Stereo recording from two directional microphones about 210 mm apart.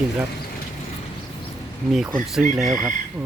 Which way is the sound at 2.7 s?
40° right (ahead or behind).